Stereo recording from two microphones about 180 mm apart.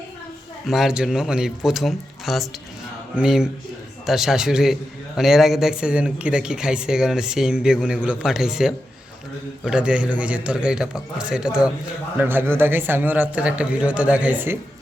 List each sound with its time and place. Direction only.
0.7 s a man's voice: 5° right (ahead or behind)